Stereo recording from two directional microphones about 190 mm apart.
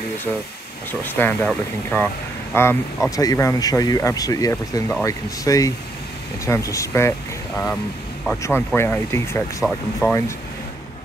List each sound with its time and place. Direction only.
1.0 s speech: 10° left (ahead or behind)
9.6 s speech: centre (ahead or behind)